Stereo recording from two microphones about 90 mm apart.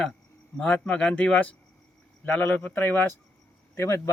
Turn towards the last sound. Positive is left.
turn(degrees=30)  # may be behind; listen again after turning